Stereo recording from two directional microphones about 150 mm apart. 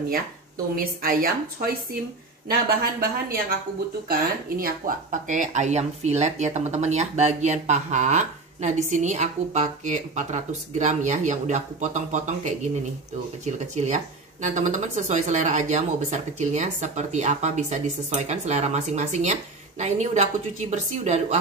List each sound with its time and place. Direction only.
0.7 s a woman's voice: 75° right (ahead or behind)
2.5 s speech: 85° right
4.1 s speech: 75° right (ahead or behind); by 21.4 s 50° right (ahead or behind)